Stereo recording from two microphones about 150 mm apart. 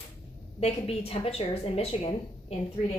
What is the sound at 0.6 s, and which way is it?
A woman's voice, 40° left (ahead or behind).